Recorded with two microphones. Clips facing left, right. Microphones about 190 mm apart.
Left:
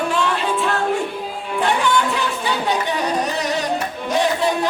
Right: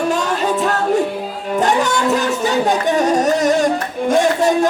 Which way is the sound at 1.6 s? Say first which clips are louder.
Right 2 dB; 45° right (ahead or behind).